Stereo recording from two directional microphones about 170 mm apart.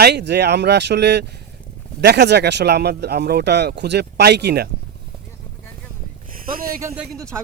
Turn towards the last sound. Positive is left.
turn(degrees=5)  # may be behind; listen again after turning